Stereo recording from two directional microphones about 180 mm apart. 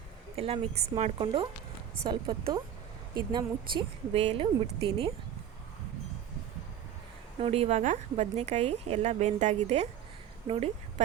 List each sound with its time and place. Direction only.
0.3 s a woman's voice: 35° right (ahead or behind)
7.3 s speech: 35° right (ahead or behind)